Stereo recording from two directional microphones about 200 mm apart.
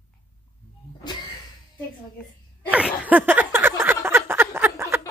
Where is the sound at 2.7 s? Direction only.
5° right (ahead or behind).